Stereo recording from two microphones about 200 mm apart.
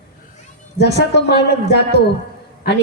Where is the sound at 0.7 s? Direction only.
55° left (ahead or behind).